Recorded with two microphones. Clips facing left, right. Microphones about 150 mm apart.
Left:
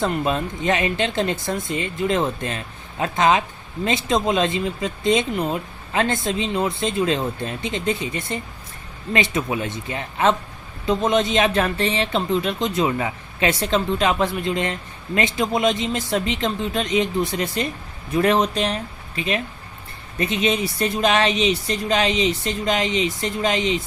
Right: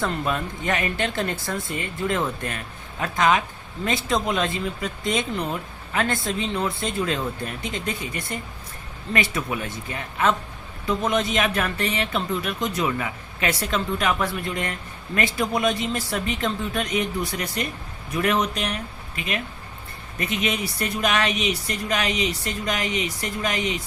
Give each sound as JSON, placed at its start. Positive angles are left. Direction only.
{"t": 0.0, "sound": "speech", "side_deg": 25}